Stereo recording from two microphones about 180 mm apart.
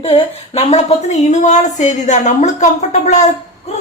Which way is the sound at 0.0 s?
35° left (ahead or behind).